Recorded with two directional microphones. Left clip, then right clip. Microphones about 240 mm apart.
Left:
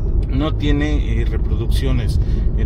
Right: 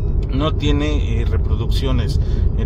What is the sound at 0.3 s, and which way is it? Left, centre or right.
Speech, right.